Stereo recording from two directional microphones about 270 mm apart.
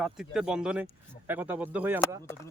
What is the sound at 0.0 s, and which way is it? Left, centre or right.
Speech, centre.